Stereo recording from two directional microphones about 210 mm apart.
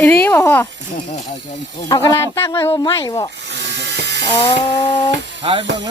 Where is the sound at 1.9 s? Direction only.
15° left (ahead or behind).